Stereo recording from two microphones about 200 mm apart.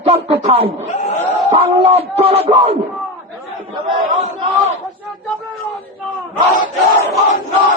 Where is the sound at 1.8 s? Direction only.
35° right (ahead or behind).